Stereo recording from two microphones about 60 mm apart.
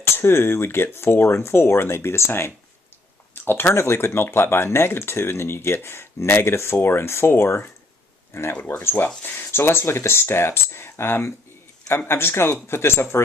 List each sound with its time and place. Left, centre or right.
0.0 s speech: left
3.3 s speech: left